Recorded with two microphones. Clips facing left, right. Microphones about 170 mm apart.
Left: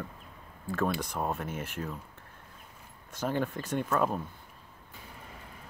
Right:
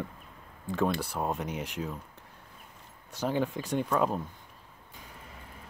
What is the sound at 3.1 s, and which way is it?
Speech, 10° right (ahead or behind).